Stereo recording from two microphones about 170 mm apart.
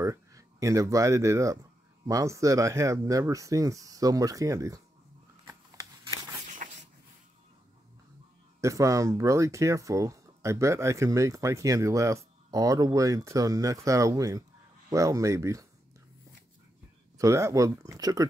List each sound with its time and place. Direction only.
0.0 s speech: 20° right (ahead or behind)
5.5 s shuffling cards: 20° right (ahead or behind)
8.5 s speech: 20° right (ahead or behind)
17.2 s speech: 15° right (ahead or behind)